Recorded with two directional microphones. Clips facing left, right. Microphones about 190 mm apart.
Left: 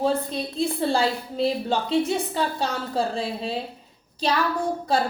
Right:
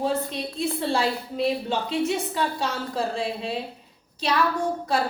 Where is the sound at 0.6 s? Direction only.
30° left (ahead or behind).